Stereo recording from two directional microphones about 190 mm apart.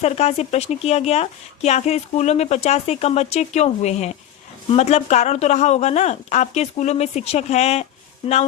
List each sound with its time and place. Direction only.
0.0 s speech: 35° left (ahead or behind)